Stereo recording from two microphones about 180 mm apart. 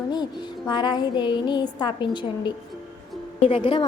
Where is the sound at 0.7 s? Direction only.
25° left (ahead or behind).